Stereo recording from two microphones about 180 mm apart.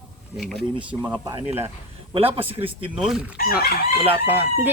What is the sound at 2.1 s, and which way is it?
Speech, 30° right (ahead or behind).